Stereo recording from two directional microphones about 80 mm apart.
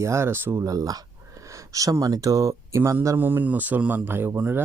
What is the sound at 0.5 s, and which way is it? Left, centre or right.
Speech, right.